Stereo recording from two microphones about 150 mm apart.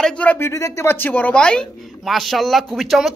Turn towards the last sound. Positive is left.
turn(degrees=0)  # may be behind; listen again after turning